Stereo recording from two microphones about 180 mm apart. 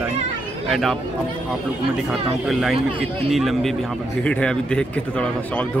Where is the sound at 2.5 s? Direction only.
Centre (ahead or behind).